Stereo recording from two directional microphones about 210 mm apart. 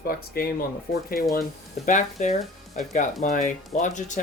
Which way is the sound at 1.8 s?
35° left (ahead or behind).